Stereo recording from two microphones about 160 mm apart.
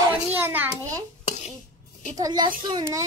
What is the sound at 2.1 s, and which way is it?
Speech, 25° right (ahead or behind).